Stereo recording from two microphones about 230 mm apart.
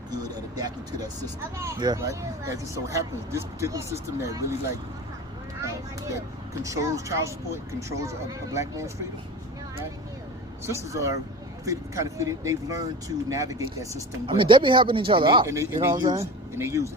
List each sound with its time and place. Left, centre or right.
0.1 s vehicle: centre
1.5 s speech: centre
6.5 s speech: centre
10.7 s speech: centre